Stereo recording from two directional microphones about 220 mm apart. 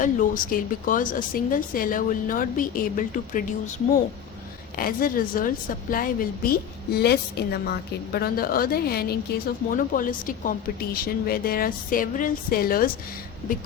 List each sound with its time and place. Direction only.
0.0 s speech: 35° left (ahead or behind)
4.8 s a woman's voice: 40° left (ahead or behind)